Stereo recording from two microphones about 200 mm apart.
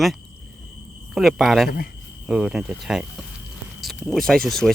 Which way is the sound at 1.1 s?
Centre (ahead or behind).